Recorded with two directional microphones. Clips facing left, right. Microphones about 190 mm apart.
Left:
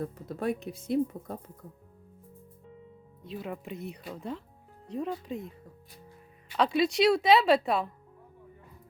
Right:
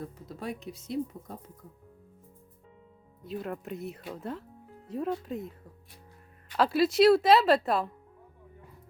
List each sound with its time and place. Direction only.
0.3 s speech: 55° left (ahead or behind)
3.2 s speech: centre (ahead or behind)
6.6 s speech: 5° right (ahead or behind)